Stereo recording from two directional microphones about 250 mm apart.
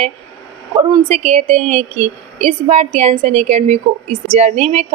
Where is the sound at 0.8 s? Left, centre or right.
Right.